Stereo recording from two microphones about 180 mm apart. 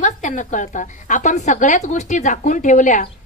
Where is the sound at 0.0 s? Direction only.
45° left (ahead or behind).